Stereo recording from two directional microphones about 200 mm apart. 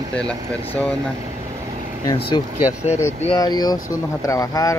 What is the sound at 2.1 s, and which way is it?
Speech, 25° left (ahead or behind).